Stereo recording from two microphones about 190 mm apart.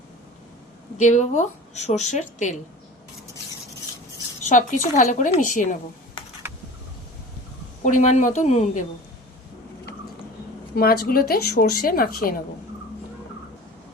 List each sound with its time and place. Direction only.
0.9 s speech: 40° left (ahead or behind)
4.4 s speech: 40° left (ahead or behind)
7.9 s speech: 40° left (ahead or behind)
10.8 s a woman's voice: 55° left (ahead or behind)